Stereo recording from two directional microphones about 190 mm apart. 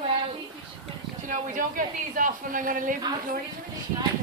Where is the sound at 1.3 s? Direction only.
45° right (ahead or behind).